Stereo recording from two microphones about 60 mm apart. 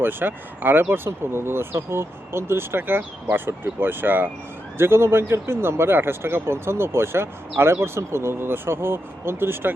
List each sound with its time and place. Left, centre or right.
0.0 s speech: right
4.8 s speech: right